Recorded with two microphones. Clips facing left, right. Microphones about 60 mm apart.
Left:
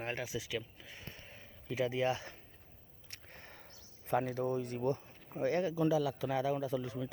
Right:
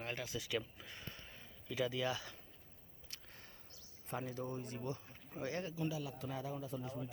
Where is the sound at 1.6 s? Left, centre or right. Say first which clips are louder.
Left 5 dB; left.